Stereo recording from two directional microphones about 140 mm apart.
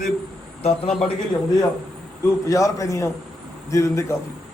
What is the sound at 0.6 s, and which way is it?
Speech, 45° left (ahead or behind).